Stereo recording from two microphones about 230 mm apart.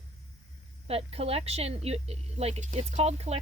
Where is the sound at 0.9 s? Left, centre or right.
Right.